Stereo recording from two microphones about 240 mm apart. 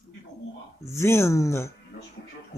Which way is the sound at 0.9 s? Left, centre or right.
Centre.